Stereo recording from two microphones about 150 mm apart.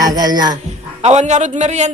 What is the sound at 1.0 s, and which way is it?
Speech, 50° right (ahead or behind).